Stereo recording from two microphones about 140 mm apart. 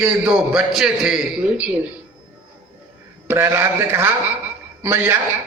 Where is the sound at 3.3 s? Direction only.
15° right (ahead or behind).